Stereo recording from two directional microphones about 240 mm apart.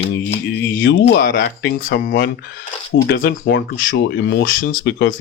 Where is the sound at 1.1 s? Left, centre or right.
Left.